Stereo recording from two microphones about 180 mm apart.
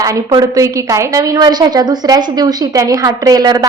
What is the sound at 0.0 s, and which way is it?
A woman's voice, 20° right (ahead or behind).